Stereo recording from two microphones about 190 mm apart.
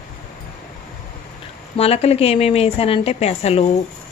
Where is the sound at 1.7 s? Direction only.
30° left (ahead or behind).